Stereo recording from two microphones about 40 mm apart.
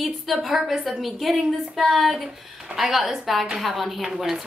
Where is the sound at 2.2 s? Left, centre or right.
Centre.